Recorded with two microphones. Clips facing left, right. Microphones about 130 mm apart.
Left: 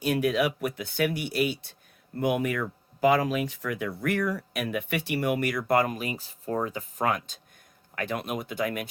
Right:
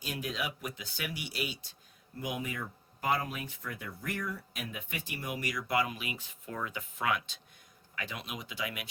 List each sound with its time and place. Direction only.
0.0 s speech: 60° left (ahead or behind)